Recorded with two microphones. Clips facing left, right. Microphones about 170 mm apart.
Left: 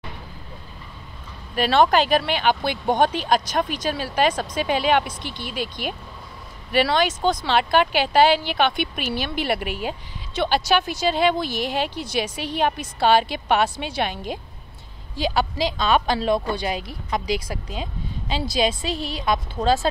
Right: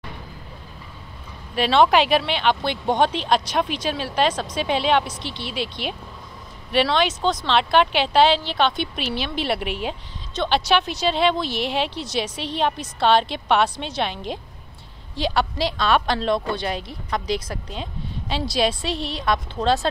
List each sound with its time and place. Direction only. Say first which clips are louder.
1.5 s a woman's voice: right 1 dB; centre (ahead or behind)
5.4 s speech: right 1 dB; 45° left (ahead or behind)
6.7 s a woman's voice: even; 5° left (ahead or behind)